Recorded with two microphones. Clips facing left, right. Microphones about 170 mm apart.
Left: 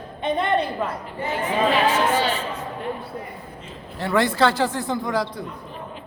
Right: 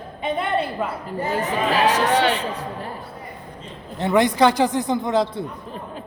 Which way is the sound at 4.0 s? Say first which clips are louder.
Right 3 dB; 20° right (ahead or behind).